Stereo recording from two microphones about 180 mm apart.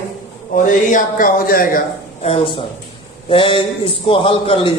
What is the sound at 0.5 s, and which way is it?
A man's voice, 45° left (ahead or behind).